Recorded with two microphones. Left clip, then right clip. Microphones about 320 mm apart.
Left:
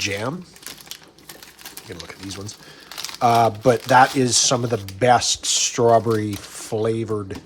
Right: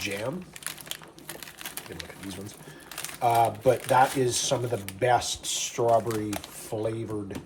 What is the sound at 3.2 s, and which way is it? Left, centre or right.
Speech, left.